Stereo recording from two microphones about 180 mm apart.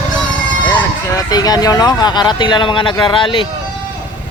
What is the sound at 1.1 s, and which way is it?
Speech, 20° left (ahead or behind).